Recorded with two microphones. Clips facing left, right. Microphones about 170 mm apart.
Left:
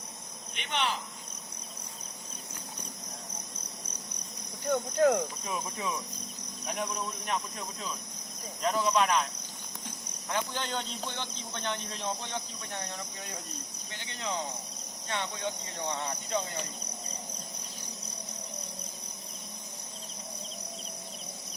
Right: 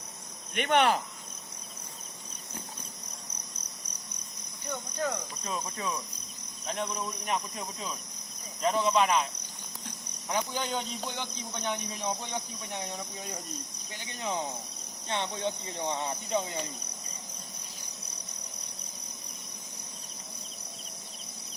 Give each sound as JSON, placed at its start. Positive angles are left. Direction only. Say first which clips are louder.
{"t": 0.5, "sound": "cricket", "louder": "right 8 dB", "side_deg": -55}
{"t": 4.7, "sound": "speech", "louder": "left 9 dB", "side_deg": 60}
{"t": 5.5, "sound": "cricket", "louder": "even", "side_deg": 10}
{"t": 7.3, "sound": "speech", "louder": "right 3 dB", "side_deg": 0}
{"t": 10.2, "sound": "a man's voice", "louder": "right 2 dB", "side_deg": -10}
{"t": 13.0, "sound": "speech", "louder": "right 2 dB", "side_deg": 0}
{"t": 13.9, "sound": "a man's voice", "louder": "right 2 dB", "side_deg": -10}